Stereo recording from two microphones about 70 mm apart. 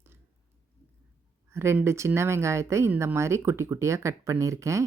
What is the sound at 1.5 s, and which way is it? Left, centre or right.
Speech, right.